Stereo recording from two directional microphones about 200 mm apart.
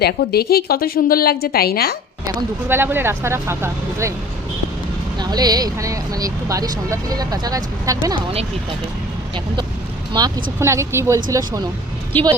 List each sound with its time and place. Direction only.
0.0 s a woman's voice: 50° left (ahead or behind)
2.3 s speech: 10° right (ahead or behind)
5.1 s speech: 20° right (ahead or behind)
10.1 s speech: 20° right (ahead or behind)